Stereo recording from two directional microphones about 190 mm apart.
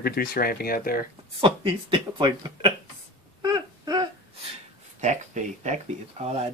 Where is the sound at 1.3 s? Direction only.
30° right (ahead or behind).